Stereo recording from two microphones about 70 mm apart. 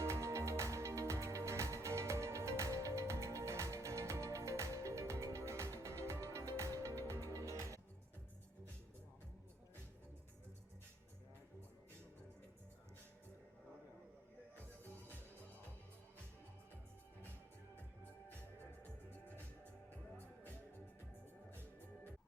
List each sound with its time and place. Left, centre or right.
0.0 s music: right